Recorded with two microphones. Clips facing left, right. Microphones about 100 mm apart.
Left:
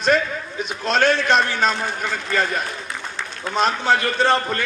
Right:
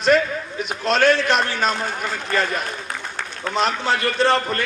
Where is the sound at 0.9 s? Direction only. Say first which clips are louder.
Even; 25° left (ahead or behind).